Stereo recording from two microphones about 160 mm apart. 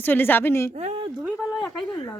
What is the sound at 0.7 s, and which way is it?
Speech, 45° right (ahead or behind).